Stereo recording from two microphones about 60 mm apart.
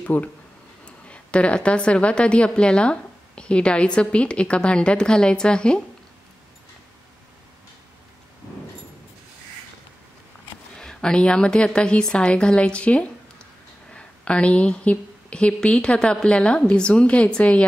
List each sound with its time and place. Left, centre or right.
0.0 s a woman's voice: left
10.8 s a woman's voice: centre